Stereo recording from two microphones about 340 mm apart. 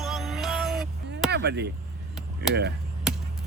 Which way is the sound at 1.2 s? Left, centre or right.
Right.